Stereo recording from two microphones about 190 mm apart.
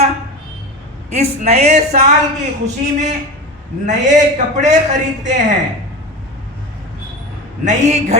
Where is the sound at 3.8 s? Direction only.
40° right (ahead or behind).